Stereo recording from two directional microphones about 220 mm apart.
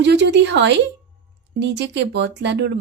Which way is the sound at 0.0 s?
50° right (ahead or behind).